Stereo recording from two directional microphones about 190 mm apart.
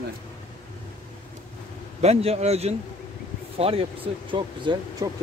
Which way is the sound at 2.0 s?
35° right (ahead or behind).